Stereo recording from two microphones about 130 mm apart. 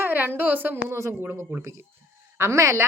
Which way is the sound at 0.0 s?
15° right (ahead or behind).